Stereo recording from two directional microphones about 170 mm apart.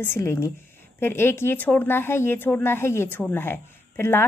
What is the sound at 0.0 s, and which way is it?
Speech, 15° left (ahead or behind).